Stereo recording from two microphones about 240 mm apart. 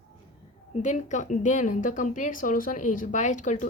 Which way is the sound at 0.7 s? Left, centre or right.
Left.